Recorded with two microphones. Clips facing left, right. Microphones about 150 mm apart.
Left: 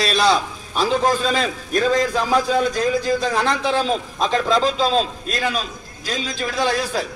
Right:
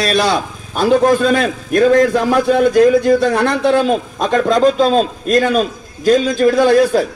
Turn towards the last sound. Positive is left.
turn(degrees=-50)  # may be behind; listen again after turning